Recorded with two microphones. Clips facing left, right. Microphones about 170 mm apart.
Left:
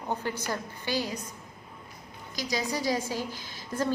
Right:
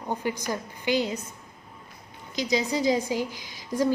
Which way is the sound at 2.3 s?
20° right (ahead or behind).